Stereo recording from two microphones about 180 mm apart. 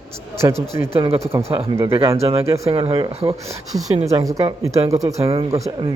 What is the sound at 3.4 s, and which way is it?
A man's voice, 20° right (ahead or behind).